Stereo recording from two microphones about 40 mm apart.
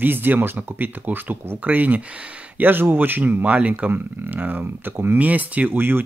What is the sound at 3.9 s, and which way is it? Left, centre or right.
Speech, right.